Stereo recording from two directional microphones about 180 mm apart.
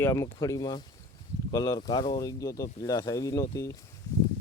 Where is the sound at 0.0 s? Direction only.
15° left (ahead or behind).